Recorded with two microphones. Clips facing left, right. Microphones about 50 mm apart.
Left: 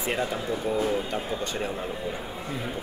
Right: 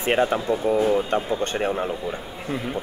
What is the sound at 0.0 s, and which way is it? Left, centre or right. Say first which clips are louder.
Speech: right 7 dB; right.